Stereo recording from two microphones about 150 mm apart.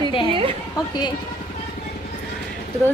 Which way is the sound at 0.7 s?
25° left (ahead or behind).